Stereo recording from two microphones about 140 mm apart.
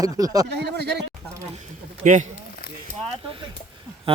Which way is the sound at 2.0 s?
70° right (ahead or behind).